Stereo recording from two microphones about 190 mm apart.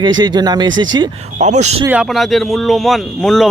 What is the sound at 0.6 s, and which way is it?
Speech, 85° right.